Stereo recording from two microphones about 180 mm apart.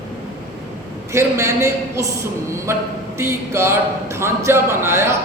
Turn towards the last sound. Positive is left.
turn(degrees=-15)  # may be behind; listen again after turning